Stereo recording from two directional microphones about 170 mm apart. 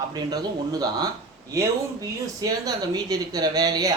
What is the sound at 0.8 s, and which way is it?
Speech, 25° right (ahead or behind).